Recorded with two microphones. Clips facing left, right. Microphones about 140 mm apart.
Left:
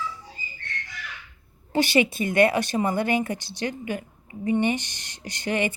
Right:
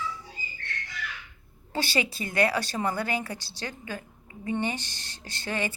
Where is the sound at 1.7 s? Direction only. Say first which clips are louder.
Left 8 dB; 20° left (ahead or behind).